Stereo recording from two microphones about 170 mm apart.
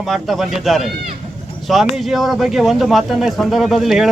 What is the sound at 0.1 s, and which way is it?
Speech, centre (ahead or behind).